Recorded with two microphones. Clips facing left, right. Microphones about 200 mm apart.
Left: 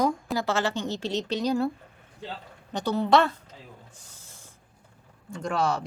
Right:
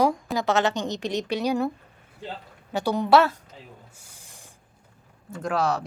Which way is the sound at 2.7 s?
10° right (ahead or behind).